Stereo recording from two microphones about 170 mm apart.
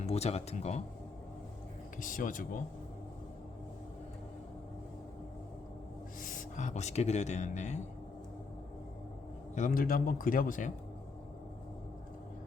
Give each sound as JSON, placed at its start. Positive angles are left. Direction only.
{"t": 0.0, "sound": "speech", "side_deg": 40}
{"t": 2.0, "sound": "speech", "side_deg": 50}
{"t": 6.2, "sound": "speech", "side_deg": 50}
{"t": 9.6, "sound": "a man's voice", "side_deg": 55}